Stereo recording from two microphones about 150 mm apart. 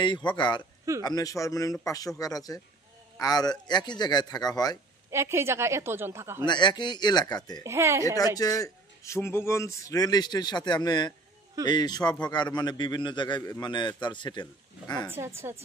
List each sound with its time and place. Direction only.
0.0 s a man's voice: 30° left (ahead or behind)
5.1 s a woman's voice: 15° right (ahead or behind)
6.4 s a man's voice: 30° left (ahead or behind)
7.6 s speech: 20° right (ahead or behind)
8.4 s a man's voice: 25° left (ahead or behind)
15.0 s a woman's voice: 15° right (ahead or behind)